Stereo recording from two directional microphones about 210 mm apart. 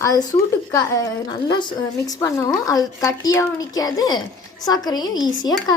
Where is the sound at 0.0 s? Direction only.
15° left (ahead or behind).